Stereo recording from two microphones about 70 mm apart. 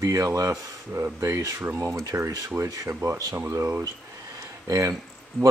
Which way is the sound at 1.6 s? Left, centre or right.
Right.